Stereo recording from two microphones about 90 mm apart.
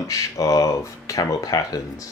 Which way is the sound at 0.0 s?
40° left (ahead or behind).